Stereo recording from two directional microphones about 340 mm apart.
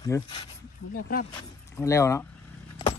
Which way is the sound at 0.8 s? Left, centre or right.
Left.